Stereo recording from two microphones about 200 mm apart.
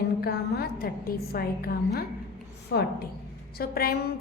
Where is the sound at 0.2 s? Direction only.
50° left (ahead or behind).